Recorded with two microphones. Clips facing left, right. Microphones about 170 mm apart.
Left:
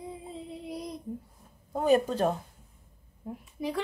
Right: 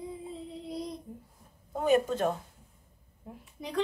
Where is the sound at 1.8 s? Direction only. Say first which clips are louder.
Left 2 dB; 35° left (ahead or behind).